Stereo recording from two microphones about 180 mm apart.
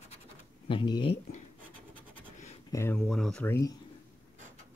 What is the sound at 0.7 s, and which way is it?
Speech, 25° left (ahead or behind).